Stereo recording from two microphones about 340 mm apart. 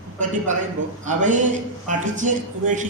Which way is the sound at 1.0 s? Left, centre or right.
Right.